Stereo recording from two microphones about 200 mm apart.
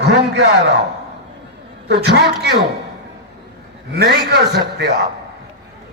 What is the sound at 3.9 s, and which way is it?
Speech, 55° right (ahead or behind).